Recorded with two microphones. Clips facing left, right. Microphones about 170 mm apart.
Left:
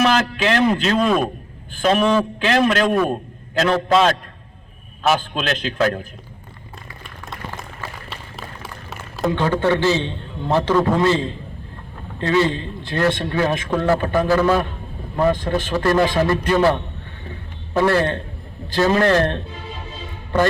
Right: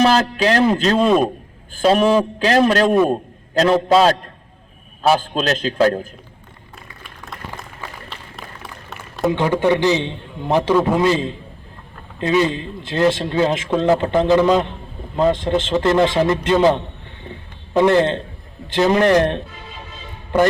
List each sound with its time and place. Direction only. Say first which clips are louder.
0.0 s a man's voice: right 3 dB; 35° right (ahead or behind)
2.9 s a man's voice: right 4 dB; 25° right (ahead or behind)
3.5 s a man's voice: right 3 dB; 35° right (ahead or behind)
5.0 s a man's voice: right 3 dB; 35° right (ahead or behind)
7.3 s a sound: left 1 dB; centre (ahead or behind)
9.3 s a man's voice: right 2 dB; 15° right (ahead or behind)